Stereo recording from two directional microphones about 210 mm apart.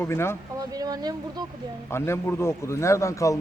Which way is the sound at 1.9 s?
10° left (ahead or behind).